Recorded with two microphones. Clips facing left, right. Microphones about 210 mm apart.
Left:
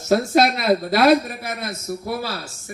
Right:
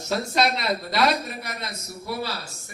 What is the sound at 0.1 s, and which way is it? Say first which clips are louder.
A man's voice: left 7 dB; 55° left (ahead or behind).